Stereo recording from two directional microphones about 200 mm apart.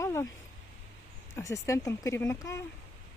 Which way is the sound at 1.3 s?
15° left (ahead or behind).